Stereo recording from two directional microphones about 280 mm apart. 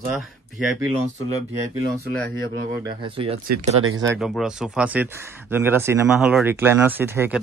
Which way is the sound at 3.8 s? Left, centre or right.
Right.